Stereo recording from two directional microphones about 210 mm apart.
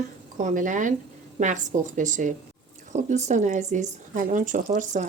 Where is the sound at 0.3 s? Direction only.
35° right (ahead or behind).